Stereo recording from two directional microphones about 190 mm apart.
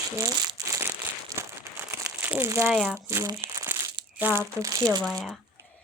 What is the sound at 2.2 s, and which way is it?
Speech, 10° right (ahead or behind).